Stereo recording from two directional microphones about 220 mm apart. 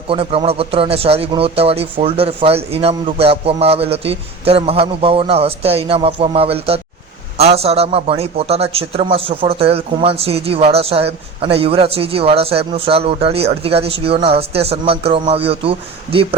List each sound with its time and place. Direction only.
0.1 s a man's voice: 25° right (ahead or behind)